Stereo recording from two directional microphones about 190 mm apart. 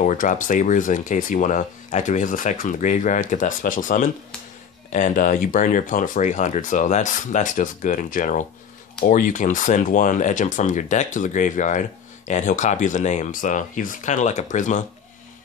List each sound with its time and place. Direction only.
0.0 s speech: 40° left (ahead or behind)